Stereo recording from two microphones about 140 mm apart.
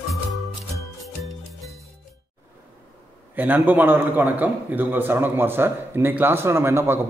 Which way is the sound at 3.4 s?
10° right (ahead or behind).